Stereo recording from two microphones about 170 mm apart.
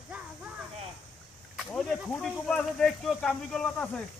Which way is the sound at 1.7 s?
5° left (ahead or behind).